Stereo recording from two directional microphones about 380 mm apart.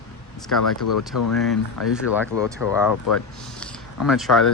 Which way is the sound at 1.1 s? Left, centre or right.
Left.